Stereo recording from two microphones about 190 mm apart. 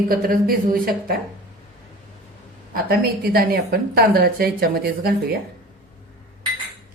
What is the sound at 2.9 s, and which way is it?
A woman's voice, 55° right (ahead or behind).